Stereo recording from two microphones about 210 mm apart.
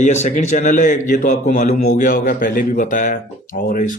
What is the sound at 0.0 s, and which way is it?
A man's voice, 35° left (ahead or behind).